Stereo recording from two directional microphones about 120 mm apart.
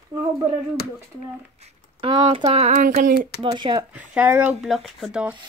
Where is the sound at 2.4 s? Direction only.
60° right (ahead or behind); by 3.3 s 90° right.